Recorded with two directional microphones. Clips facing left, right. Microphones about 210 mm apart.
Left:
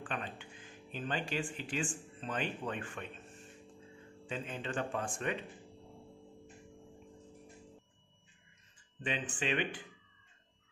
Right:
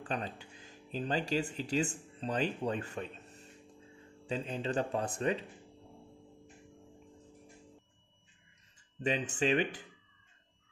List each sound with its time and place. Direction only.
0.0 s music: 40° right (ahead or behind)
0.9 s speech: 40° right (ahead or behind)
9.0 s speech: 40° right (ahead or behind)